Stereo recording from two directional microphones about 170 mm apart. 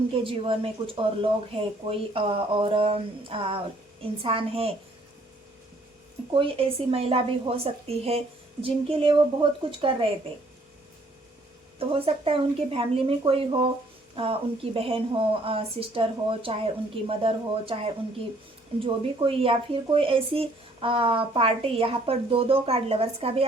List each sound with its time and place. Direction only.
0.2 s speech: 30° right (ahead or behind)
6.3 s speech: 30° right (ahead or behind)
11.8 s speech: 35° right (ahead or behind)
19.2 s speech: 30° right (ahead or behind)